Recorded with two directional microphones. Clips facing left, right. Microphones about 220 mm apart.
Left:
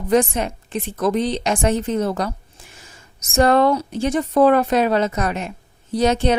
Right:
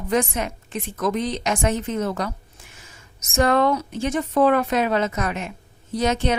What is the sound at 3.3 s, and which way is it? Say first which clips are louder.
A woman's voice: left 3 dB; 35° left (ahead or behind).